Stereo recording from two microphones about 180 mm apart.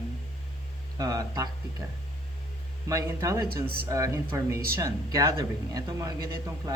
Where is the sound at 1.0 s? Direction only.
20° right (ahead or behind).